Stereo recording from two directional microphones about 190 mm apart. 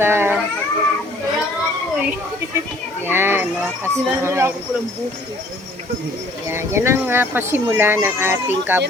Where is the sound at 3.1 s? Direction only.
10° right (ahead or behind).